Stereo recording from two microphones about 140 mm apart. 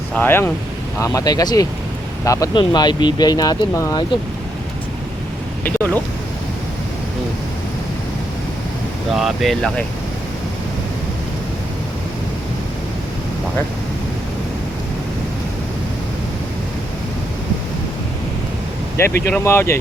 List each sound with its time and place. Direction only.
0.1 s speech: 15° left (ahead or behind)
5.6 s speech: 10° left (ahead or behind)
9.1 s speech: centre (ahead or behind)
18.9 s speech: 20° left (ahead or behind)